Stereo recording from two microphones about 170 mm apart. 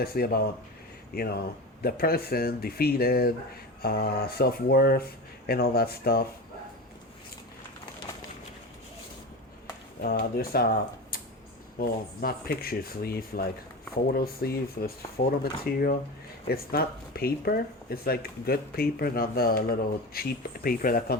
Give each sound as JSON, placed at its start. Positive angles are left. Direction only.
{"t": 0.0, "sound": "speech", "side_deg": 65}
{"t": 10.0, "sound": "speech", "side_deg": 65}